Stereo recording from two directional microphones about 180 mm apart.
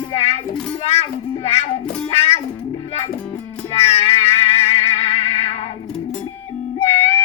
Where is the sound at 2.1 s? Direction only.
35° left (ahead or behind).